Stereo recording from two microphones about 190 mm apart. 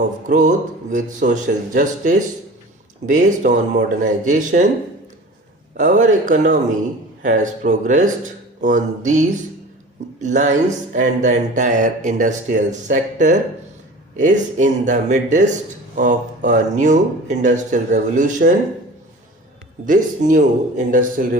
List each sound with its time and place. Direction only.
0.3 s speech: 40° right (ahead or behind)
5.7 s speech: 40° right (ahead or behind)
10.2 s speech: 40° right (ahead or behind)
19.8 s speech: 45° right (ahead or behind)